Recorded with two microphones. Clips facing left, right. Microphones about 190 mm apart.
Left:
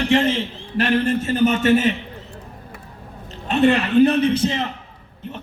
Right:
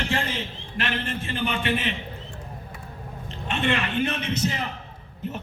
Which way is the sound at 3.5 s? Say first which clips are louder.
Left 10 dB; 40° left (ahead or behind).